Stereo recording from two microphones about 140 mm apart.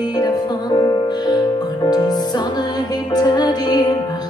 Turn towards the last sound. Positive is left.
turn(degrees=30)  # may be behind; listen again after turning